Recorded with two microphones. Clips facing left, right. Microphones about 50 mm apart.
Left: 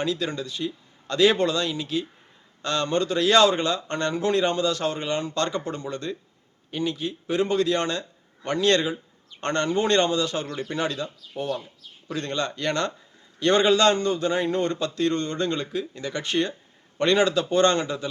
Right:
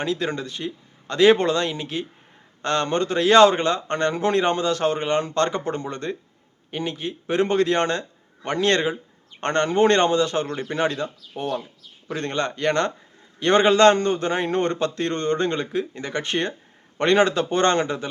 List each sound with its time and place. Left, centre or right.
0.0 s a man's voice: right